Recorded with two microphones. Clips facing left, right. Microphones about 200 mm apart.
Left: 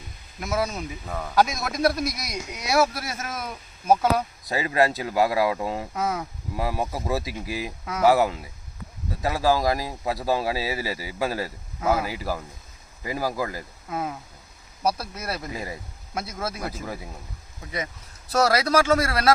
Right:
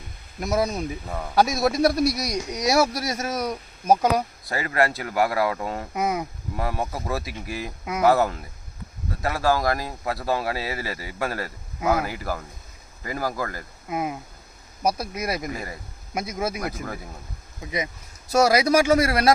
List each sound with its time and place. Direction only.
0.3 s speech: 35° right (ahead or behind)
1.0 s speech: 10° right (ahead or behind)
1.5 s speech: 35° right (ahead or behind)
4.4 s speech: 15° left (ahead or behind)
5.9 s speech: 15° right (ahead or behind)
6.6 s speech: 10° left (ahead or behind)
13.9 s speech: 15° right (ahead or behind)
15.5 s speech: 10° left (ahead or behind)
16.1 s speech: 15° right (ahead or behind)
16.8 s speech: 10° left (ahead or behind)
18.3 s speech: 10° right (ahead or behind)